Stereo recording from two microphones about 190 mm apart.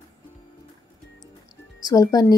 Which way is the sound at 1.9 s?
20° left (ahead or behind).